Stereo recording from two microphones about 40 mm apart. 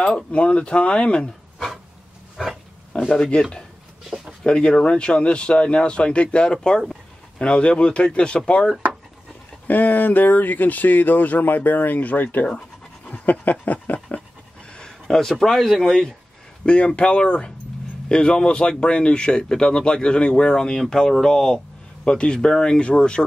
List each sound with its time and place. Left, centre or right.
0.3 s speech: left
2.4 s pig: centre
3.2 s speech: left
9.7 s speech: left
13.0 s dog: left
13.9 s pant: left
14.9 s speech: centre
16.6 s speech: left
20.7 s speech: centre
22.0 s speech: left